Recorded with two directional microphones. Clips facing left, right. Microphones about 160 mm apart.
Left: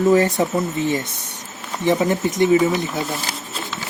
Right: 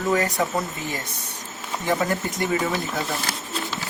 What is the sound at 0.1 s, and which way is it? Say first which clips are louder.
Speech: left 4 dB; 30° left (ahead or behind).